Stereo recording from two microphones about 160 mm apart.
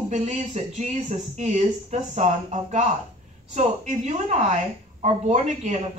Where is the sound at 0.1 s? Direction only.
50° right (ahead or behind).